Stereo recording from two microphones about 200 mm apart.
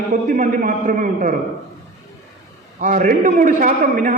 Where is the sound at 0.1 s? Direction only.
40° right (ahead or behind).